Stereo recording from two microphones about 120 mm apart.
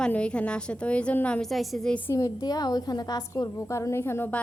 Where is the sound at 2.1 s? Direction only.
30° left (ahead or behind).